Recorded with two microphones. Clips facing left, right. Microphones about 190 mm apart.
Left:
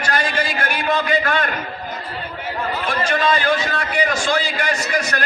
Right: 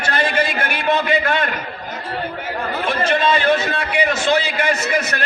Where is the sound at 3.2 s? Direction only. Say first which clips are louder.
Right 1 dB; 25° right (ahead or behind).